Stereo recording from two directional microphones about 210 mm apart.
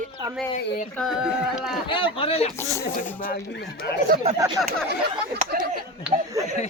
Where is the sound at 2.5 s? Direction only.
15° left (ahead or behind).